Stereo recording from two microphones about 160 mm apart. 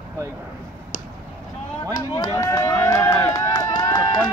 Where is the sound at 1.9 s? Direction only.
20° left (ahead or behind).